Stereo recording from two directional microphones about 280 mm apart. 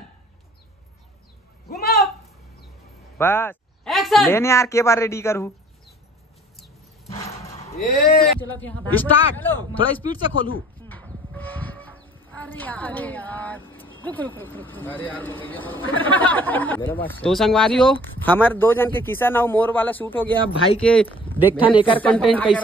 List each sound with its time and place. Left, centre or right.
1.7 s a sound: left
3.2 s speech: centre
7.8 s speech: centre
10.5 s a sound: centre
12.4 s speech: centre
21.5 s speech: centre
22.0 s speech: centre